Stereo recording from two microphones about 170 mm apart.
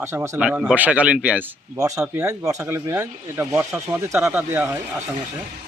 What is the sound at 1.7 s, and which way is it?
Speech, 20° right (ahead or behind).